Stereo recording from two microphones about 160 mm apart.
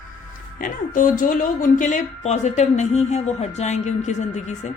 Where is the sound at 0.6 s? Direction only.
60° left (ahead or behind).